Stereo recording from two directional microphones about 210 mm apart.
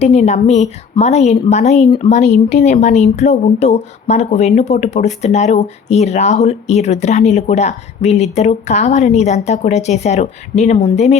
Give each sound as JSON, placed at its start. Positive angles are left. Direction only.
{"t": 0.0, "sound": "a woman's voice", "side_deg": 30}